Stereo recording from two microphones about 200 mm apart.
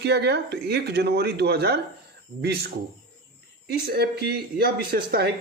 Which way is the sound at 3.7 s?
50° right (ahead or behind).